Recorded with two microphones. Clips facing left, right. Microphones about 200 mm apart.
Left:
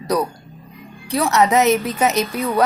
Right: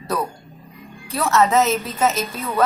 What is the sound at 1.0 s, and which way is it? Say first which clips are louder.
A woman's voice: left 2 dB; 15° left (ahead or behind).